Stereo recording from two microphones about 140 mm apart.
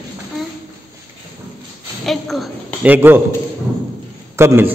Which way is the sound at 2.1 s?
Centre (ahead or behind).